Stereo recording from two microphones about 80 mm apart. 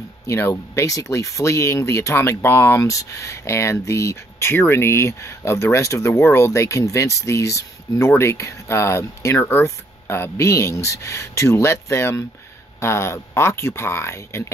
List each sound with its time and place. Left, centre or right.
0.3 s speech: left